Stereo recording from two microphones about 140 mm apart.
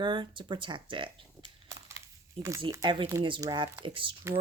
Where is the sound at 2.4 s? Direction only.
20° right (ahead or behind).